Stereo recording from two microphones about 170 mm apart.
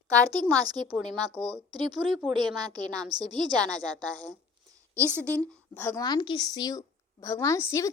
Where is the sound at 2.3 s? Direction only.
25° right (ahead or behind).